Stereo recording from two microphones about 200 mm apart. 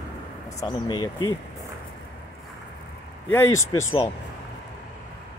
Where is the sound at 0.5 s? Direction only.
20° left (ahead or behind).